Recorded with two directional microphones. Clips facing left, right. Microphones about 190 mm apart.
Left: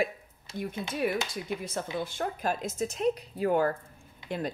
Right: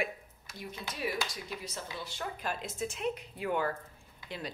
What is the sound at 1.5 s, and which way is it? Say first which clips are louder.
A woman's voice: left 8 dB; 55° left (ahead or behind).